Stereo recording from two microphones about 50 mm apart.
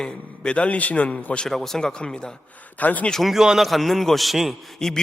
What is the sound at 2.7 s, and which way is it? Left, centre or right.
Speech, left.